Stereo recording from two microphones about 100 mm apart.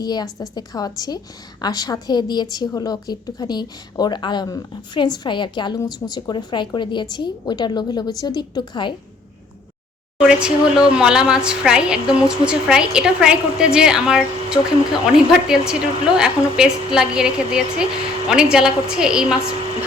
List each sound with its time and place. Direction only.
0.0 s a woman's voice: 40° left (ahead or behind)
10.2 s a woman's voice: 10° right (ahead or behind)